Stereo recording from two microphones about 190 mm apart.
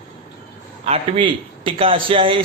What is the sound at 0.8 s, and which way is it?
A man's voice, 30° right (ahead or behind).